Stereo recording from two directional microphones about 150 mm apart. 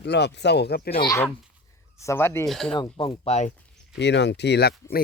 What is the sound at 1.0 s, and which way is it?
Speech, 20° left (ahead or behind).